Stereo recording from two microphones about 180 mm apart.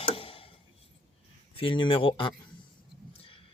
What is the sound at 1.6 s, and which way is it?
Speech, 30° left (ahead or behind).